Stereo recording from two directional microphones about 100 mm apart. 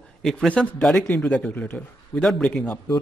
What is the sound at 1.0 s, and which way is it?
A man's voice, 15° left (ahead or behind).